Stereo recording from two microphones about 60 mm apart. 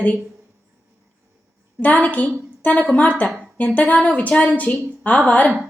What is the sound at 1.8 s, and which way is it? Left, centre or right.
A woman's voice, left.